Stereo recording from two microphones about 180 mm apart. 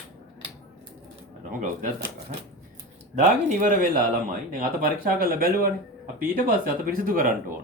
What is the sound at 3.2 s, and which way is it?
Speech, 45° right (ahead or behind).